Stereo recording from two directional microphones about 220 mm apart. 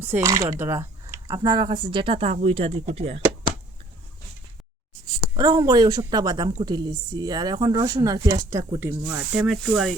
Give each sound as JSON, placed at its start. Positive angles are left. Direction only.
{"t": 0.0, "sound": "speech", "side_deg": -10}
{"t": 5.4, "sound": "a woman's voice", "side_deg": -15}